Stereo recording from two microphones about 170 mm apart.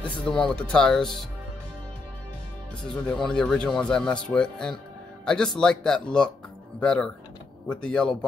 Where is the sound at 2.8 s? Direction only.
5° left (ahead or behind).